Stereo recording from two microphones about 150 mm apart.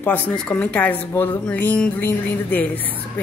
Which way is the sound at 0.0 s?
10° left (ahead or behind).